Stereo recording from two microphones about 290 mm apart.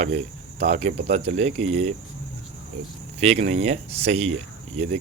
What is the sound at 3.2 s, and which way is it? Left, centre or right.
Speech, right.